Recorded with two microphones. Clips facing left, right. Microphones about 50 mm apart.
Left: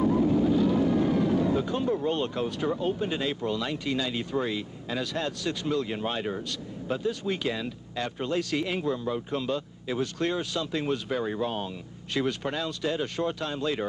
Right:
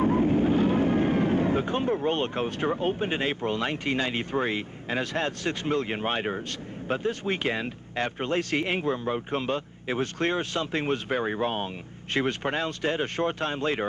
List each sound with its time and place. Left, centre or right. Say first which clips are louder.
0.0 s speech: right 1 dB; right